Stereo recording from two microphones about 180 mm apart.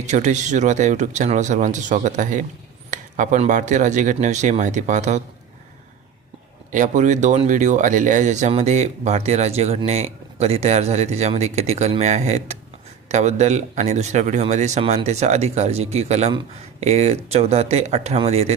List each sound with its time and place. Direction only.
0.0 s speech: 40° right (ahead or behind)
6.7 s speech: 45° right (ahead or behind)